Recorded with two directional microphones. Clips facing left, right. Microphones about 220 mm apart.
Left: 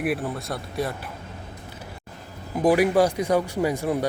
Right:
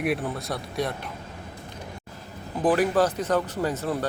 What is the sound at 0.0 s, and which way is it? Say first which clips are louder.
Speech: left 1 dB; centre (ahead or behind).